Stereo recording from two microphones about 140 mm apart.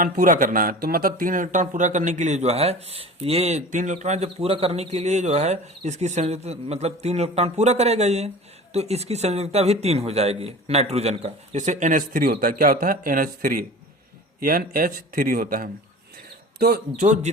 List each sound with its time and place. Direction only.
0.0 s speech: 80° right